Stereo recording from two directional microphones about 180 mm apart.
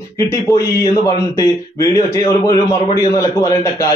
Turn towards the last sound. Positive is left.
turn(degrees=15)  # may be behind; listen again after turning